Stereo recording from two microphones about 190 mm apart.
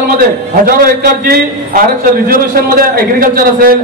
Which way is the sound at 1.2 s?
55° right (ahead or behind).